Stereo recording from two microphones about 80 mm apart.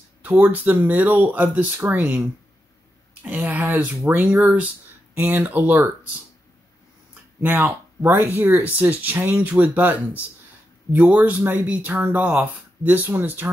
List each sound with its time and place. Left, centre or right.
0.2 s speech: right
7.4 s speech: right